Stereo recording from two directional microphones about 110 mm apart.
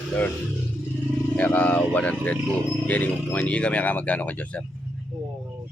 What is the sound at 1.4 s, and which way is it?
Speech, 15° left (ahead or behind).